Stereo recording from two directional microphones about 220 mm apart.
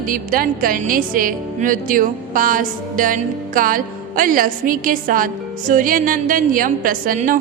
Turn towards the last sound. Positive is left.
turn(degrees=-40)  # may be behind; listen again after turning